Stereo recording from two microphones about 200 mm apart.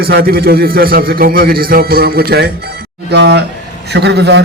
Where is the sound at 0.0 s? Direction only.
50° right (ahead or behind).